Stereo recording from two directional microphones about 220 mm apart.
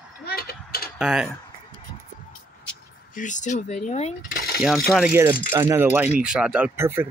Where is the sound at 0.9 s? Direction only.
5° right (ahead or behind).